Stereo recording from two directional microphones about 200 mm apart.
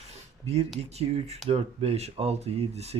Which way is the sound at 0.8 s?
30° right (ahead or behind).